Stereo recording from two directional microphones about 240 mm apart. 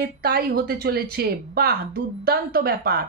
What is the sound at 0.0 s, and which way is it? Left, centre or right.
A woman's voice, right.